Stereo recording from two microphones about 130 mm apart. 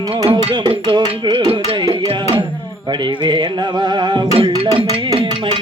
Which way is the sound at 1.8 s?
30° right (ahead or behind).